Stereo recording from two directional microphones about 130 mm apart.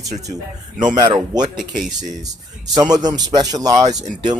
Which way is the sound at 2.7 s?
30° right (ahead or behind).